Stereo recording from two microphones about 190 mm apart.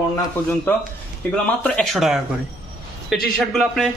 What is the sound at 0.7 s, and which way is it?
A man's voice, 10° left (ahead or behind).